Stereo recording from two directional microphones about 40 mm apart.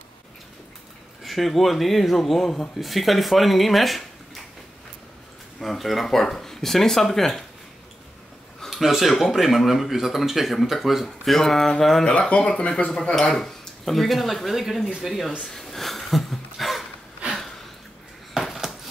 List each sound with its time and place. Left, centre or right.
1.2 s speech: centre
5.6 s speech: centre
8.6 s speech: centre
11.1 s speech: centre
12.1 s speech: left; by 15.3 s centre
15.4 s a sound: centre
18.4 s a sound: centre